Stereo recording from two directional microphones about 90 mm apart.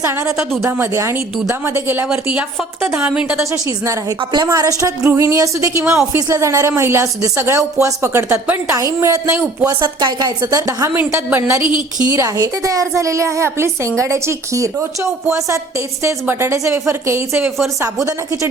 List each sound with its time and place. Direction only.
0.6 s a woman's voice: 30° right (ahead or behind)
2.0 s a woman's voice: 10° right (ahead or behind)
4.2 s a woman's voice: 55° right (ahead or behind)
4.4 s speech: 40° right (ahead or behind)
9.8 s a woman's voice: 55° right (ahead or behind); by 10.9 s 40° right (ahead or behind)
10.9 s a woman's voice: 25° right (ahead or behind)
11.6 s a woman's voice: 60° left (ahead or behind)
12.1 s speech: 35° right (ahead or behind)